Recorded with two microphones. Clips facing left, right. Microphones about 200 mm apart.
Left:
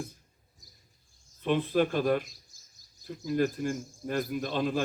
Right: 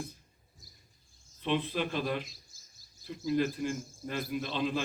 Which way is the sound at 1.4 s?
50° left (ahead or behind).